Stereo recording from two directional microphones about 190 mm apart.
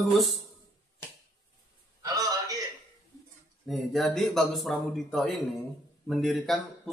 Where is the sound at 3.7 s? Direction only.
Centre (ahead or behind).